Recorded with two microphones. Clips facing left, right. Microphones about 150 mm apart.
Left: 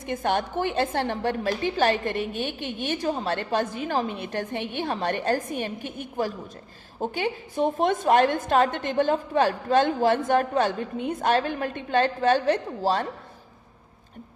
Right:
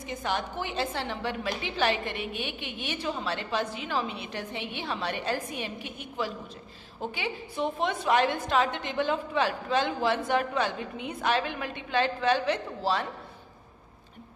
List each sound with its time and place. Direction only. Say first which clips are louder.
0.0 s a woman's voice: left 6 dB; 55° left (ahead or behind)